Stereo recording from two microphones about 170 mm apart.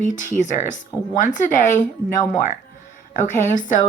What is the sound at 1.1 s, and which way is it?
Speech, 50° left (ahead or behind).